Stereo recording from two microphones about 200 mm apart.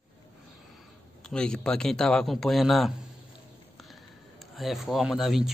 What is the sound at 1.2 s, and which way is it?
Speech, 5° left (ahead or behind).